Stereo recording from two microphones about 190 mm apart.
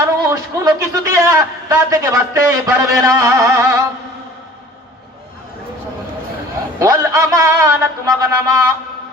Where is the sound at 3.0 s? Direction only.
15° right (ahead or behind).